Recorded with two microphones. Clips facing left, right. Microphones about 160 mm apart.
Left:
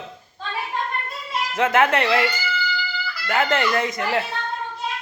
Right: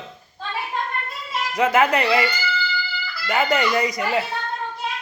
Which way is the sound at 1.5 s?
Centre (ahead or behind).